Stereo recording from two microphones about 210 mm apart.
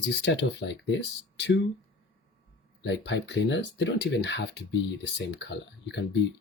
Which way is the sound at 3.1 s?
55° left (ahead or behind).